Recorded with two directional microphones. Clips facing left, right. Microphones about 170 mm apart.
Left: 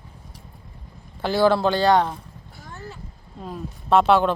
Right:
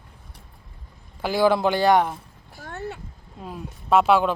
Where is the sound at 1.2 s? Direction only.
10° right (ahead or behind).